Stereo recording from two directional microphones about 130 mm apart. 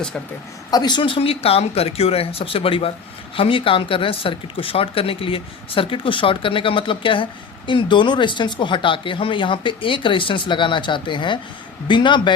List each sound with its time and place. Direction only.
0.7 s speech: 35° left (ahead or behind)